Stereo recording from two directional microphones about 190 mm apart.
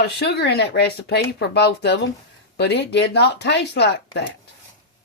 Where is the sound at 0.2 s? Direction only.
60° left (ahead or behind).